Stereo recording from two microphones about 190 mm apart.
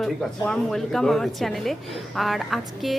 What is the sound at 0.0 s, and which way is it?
A woman's voice, 5° left (ahead or behind).